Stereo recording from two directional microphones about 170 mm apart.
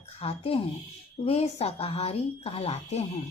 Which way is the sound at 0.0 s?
35° left (ahead or behind).